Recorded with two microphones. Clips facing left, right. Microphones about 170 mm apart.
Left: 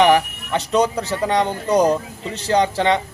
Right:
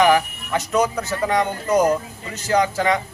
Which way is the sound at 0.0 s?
30° left (ahead or behind).